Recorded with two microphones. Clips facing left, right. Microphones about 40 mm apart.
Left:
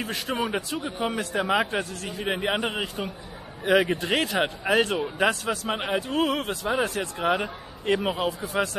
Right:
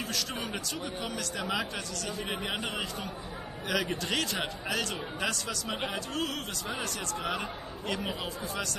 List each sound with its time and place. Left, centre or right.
0.0 s a man's voice: left